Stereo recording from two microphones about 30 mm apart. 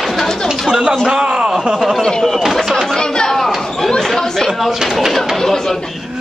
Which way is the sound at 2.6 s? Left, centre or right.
Centre.